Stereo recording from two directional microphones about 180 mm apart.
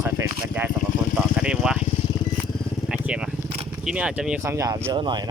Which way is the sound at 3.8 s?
5° right (ahead or behind).